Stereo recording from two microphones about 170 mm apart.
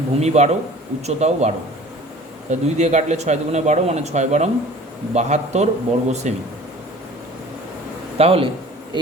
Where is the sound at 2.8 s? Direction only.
40° right (ahead or behind).